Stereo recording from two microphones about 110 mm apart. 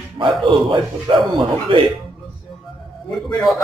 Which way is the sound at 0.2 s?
45° right (ahead or behind).